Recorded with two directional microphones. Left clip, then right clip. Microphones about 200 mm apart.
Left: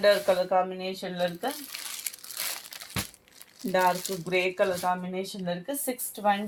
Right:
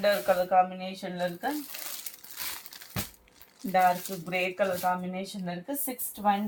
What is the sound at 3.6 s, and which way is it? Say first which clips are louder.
Speech: even; 55° left (ahead or behind).